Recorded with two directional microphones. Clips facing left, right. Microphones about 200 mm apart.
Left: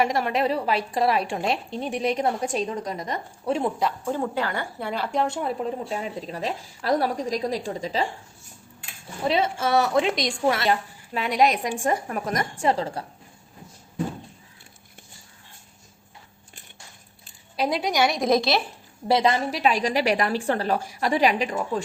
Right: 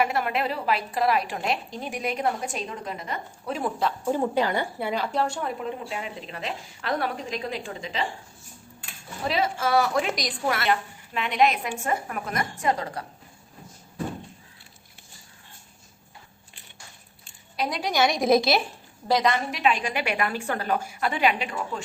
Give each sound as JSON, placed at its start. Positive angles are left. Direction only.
{"t": 0.0, "sound": "a woman's voice", "side_deg": 30}
{"t": 4.0, "sound": "speech", "side_deg": -15}
{"t": 5.2, "sound": "a woman's voice", "side_deg": 25}
{"t": 5.6, "sound": "a woman's voice", "side_deg": 40}
{"t": 9.2, "sound": "a woman's voice", "side_deg": 30}
{"t": 17.6, "sound": "a woman's voice", "side_deg": 0}
{"t": 17.8, "sound": "a woman's voice", "side_deg": 15}
{"t": 18.1, "sound": "a woman's voice", "side_deg": 0}
{"t": 19.0, "sound": "a woman's voice", "side_deg": 25}